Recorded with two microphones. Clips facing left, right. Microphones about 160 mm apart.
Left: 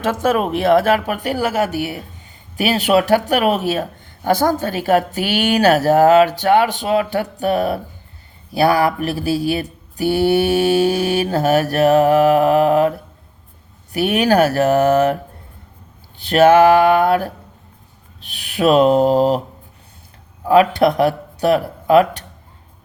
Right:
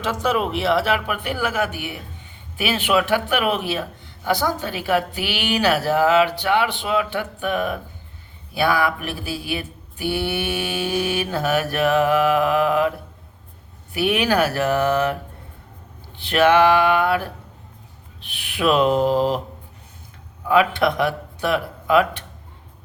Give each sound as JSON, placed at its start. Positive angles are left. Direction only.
{"t": 0.0, "sound": "speech", "side_deg": 50}
{"t": 13.9, "sound": "speech", "side_deg": 45}
{"t": 20.4, "sound": "speech", "side_deg": 40}